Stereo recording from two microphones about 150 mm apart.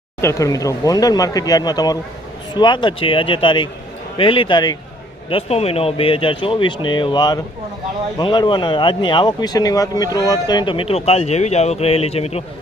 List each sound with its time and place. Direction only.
0.2 s speech: 20° left (ahead or behind)
5.3 s speech: 40° left (ahead or behind)